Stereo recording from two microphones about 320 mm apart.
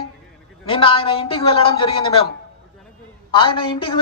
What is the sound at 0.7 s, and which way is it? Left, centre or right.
A woman's voice, centre.